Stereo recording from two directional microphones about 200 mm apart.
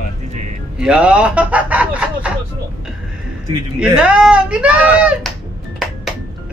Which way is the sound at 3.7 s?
5° right (ahead or behind).